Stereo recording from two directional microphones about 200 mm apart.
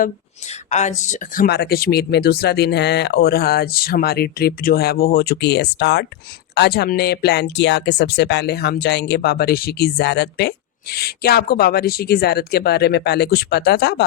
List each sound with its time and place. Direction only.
0.7 s speech: 35° left (ahead or behind); by 14.0 s 55° left (ahead or behind)